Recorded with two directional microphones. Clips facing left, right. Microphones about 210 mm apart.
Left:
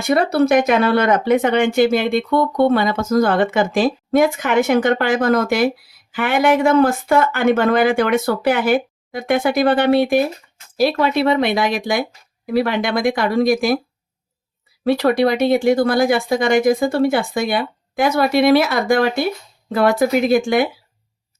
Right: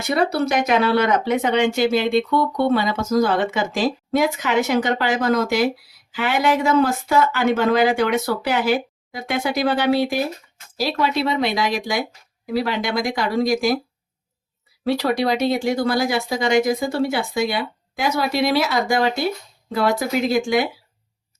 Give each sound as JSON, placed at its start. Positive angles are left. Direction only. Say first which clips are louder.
{"t": 0.1, "sound": "speech", "louder": "left 5 dB", "side_deg": 55}
{"t": 14.8, "sound": "speech", "louder": "left 4 dB", "side_deg": 55}